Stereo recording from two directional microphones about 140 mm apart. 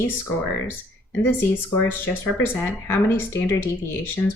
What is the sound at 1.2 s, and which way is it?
Speech, 15° left (ahead or behind).